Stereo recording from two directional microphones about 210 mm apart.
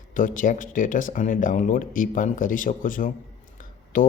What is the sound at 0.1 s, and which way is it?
Speech, 40° left (ahead or behind).